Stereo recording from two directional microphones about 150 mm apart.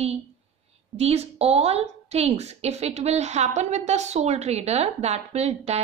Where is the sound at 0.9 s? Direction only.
45° right (ahead or behind).